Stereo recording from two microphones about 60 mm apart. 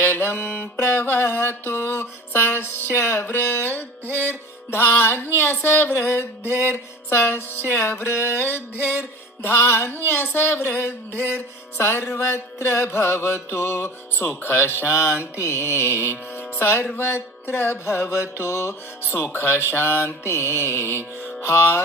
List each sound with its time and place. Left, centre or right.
0.0 s music: left
8.7 s music: right
9.5 s music: left
19.0 s music: left